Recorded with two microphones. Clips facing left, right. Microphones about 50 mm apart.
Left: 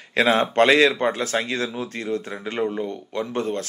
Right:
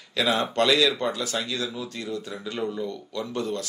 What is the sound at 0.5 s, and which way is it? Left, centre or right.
Speech, left.